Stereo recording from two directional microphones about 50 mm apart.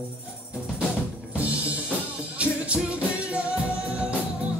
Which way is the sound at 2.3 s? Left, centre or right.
Right.